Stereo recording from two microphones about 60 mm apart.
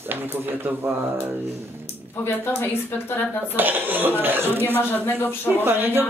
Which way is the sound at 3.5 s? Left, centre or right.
Right.